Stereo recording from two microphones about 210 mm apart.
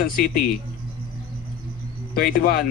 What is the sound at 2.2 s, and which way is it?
Speech, 45° left (ahead or behind).